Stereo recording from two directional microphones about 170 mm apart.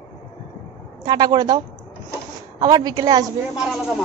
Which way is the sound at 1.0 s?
25° right (ahead or behind).